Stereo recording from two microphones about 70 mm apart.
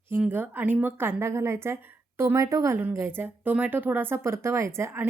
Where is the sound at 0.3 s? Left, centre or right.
Right.